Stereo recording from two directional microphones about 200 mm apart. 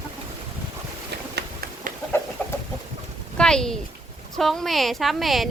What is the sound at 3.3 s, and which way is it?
A woman's voice, 5° left (ahead or behind).